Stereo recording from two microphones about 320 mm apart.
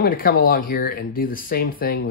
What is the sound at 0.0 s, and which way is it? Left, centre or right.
Speech, left.